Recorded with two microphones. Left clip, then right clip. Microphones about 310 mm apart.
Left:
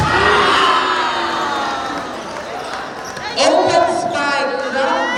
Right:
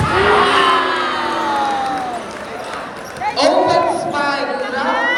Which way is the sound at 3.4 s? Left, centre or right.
Centre.